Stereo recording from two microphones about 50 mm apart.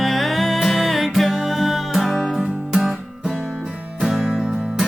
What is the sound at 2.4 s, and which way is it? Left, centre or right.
Music, centre.